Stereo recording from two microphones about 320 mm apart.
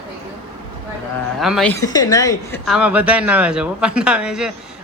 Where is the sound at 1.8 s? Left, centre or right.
Centre.